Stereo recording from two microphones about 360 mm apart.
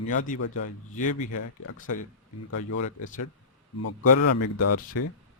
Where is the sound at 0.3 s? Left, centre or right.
Left.